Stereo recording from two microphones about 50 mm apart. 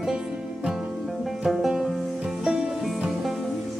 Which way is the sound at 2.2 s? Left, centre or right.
Right.